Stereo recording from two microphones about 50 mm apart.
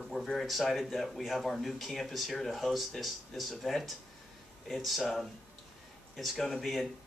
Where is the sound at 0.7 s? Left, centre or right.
Centre.